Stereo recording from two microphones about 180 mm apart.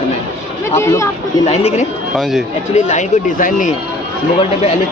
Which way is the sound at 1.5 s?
35° left (ahead or behind).